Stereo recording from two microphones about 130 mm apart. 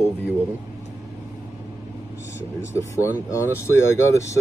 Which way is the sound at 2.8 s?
25° left (ahead or behind).